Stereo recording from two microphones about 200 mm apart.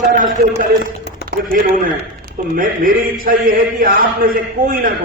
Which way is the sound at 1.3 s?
45° right (ahead or behind).